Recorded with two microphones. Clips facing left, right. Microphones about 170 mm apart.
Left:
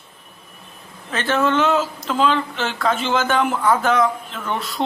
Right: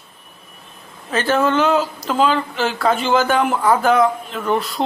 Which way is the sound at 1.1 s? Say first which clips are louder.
Right 2 dB; 5° right (ahead or behind).